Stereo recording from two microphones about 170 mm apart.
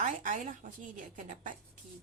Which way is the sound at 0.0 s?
45° right (ahead or behind).